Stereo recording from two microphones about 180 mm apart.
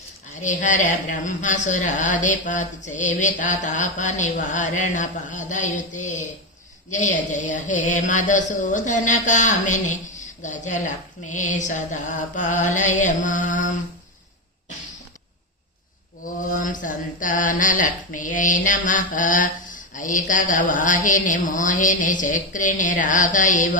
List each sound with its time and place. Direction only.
0.4 s speech: 45° left (ahead or behind)
16.5 s speech: 45° left (ahead or behind)